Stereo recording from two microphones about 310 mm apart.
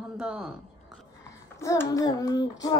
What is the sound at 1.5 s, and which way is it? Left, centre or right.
Child singing, centre.